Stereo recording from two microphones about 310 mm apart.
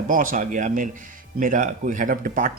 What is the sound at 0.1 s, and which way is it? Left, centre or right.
Speech, right.